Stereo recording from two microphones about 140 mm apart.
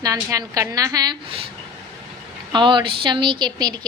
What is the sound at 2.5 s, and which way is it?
A woman's voice, 35° right (ahead or behind).